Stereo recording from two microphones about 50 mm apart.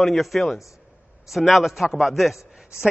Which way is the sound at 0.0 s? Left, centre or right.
Centre.